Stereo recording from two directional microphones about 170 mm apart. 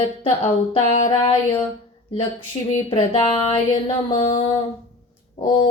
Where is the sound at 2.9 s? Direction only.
35° left (ahead or behind).